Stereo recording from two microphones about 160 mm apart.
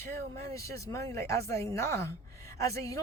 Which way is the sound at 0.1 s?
20° left (ahead or behind).